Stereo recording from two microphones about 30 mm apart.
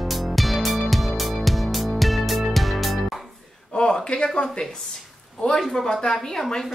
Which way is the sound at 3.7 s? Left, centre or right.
Left.